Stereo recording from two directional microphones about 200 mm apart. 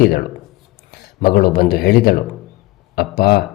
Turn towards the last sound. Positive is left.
turn(degrees=50)  # may be behind; listen again after turning